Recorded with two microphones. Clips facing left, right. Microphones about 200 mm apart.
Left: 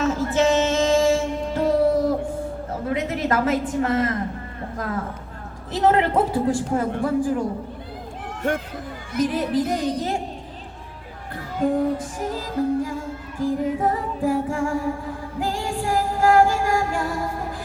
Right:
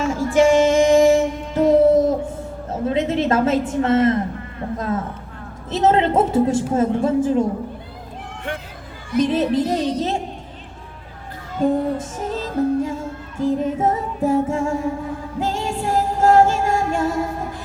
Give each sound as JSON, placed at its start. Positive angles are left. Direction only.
{"t": 0.0, "sound": "music", "side_deg": -10}
{"t": 2.6, "sound": "a woman's voice", "side_deg": -25}
{"t": 5.7, "sound": "a woman's voice", "side_deg": -25}
{"t": 8.4, "sound": "speech", "side_deg": 45}
{"t": 9.2, "sound": "a woman's voice", "side_deg": -25}
{"t": 11.6, "sound": "a woman's voice", "side_deg": -25}
{"t": 15.4, "sound": "music", "side_deg": -25}